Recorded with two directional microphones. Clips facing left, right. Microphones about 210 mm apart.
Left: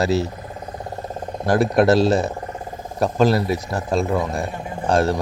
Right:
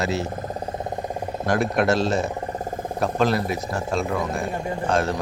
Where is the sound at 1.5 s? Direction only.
35° left (ahead or behind).